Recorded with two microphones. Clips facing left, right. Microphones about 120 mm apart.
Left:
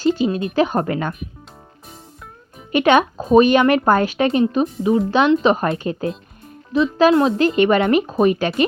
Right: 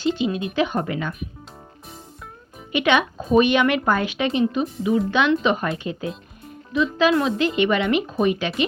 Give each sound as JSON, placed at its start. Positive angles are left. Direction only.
{"t": 0.2, "sound": "speech", "side_deg": 40}
{"t": 2.7, "sound": "speech", "side_deg": 40}